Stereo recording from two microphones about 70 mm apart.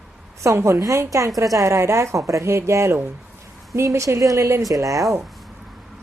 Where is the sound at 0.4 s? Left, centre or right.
Right.